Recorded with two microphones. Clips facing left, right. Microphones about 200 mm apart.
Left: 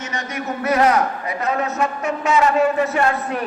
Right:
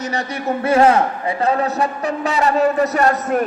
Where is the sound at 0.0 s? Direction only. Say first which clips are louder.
Right 4 dB; 35° right (ahead or behind).